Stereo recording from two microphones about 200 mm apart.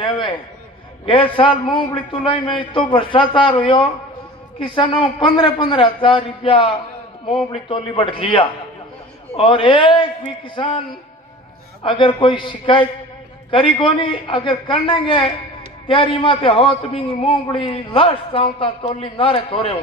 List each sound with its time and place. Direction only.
0.0 s a man's voice: 25° left (ahead or behind)
11.8 s a man's voice: 25° left (ahead or behind)